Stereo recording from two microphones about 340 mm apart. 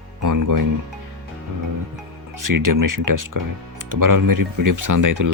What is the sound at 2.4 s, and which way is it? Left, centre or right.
Speech, right.